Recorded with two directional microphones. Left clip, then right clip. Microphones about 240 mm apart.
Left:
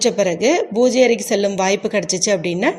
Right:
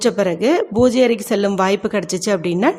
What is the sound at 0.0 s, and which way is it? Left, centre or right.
Speech, centre.